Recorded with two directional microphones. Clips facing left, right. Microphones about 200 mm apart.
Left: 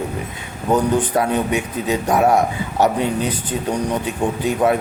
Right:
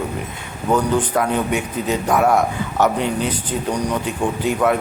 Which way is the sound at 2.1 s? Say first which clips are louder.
Left 1 dB; 35° left (ahead or behind).